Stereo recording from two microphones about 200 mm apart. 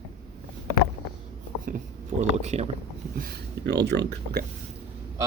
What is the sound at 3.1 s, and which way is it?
Speech, 50° right (ahead or behind).